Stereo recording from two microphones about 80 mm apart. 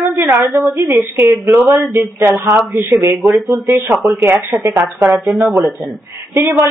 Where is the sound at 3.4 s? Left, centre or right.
Right.